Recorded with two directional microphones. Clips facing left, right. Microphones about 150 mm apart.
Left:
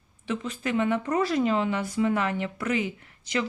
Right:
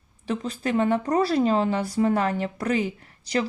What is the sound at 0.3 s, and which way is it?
Speech, 35° right (ahead or behind).